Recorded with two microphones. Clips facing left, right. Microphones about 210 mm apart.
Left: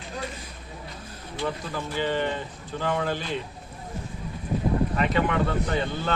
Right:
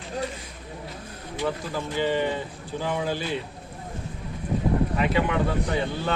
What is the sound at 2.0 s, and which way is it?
Speech, 10° right (ahead or behind).